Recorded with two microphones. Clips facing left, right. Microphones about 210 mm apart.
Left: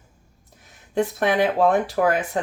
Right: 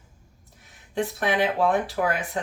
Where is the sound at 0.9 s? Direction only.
45° left (ahead or behind).